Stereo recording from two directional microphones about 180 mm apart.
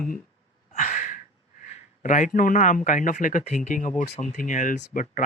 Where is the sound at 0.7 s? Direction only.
40° left (ahead or behind).